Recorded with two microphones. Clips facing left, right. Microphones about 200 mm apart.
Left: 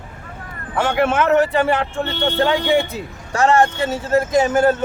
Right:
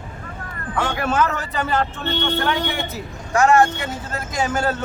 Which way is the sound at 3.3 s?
30° left (ahead or behind).